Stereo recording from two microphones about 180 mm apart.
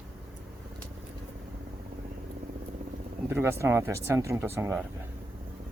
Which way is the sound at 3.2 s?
10° right (ahead or behind).